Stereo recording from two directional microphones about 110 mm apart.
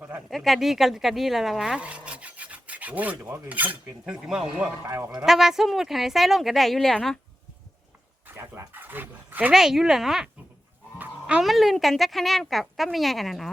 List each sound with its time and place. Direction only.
0.3 s speech: centre (ahead or behind)
4.9 s speech: 20° right (ahead or behind)
5.2 s speech: 5° right (ahead or behind)
8.3 s speech: 20° right (ahead or behind)
9.5 s speech: 5° right (ahead or behind)